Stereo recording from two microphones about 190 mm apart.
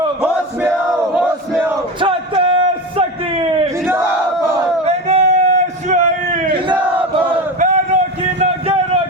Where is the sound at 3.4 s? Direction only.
30° right (ahead or behind).